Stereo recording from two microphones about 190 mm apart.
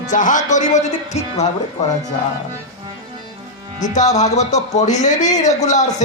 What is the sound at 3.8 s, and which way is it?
Music, 40° left (ahead or behind).